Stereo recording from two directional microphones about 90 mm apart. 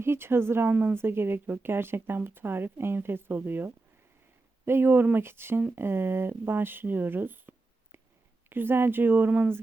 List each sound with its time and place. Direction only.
0.0 s speech: 25° right (ahead or behind)